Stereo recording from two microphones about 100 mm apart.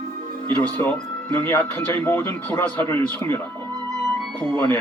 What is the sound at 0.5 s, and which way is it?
Speech, 15° left (ahead or behind).